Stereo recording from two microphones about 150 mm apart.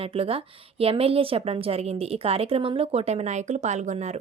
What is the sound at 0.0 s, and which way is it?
A woman's voice, 40° right (ahead or behind).